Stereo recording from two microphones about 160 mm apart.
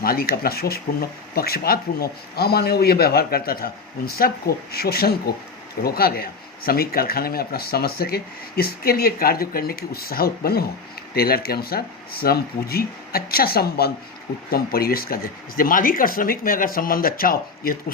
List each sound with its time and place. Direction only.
0.0 s speech: 70° left (ahead or behind)